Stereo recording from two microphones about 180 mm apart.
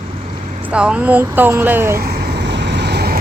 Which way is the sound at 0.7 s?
5° right (ahead or behind).